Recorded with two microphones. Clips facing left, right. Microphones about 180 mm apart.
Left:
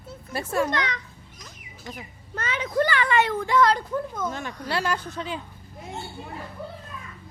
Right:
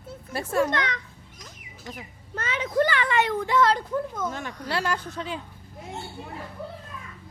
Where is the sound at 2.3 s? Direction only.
25° right (ahead or behind).